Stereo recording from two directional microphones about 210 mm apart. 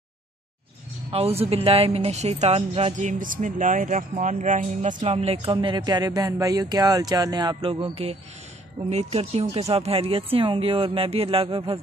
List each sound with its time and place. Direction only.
1.1 s speech: 30° right (ahead or behind)